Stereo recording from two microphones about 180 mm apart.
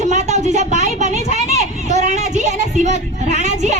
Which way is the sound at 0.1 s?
40° right (ahead or behind).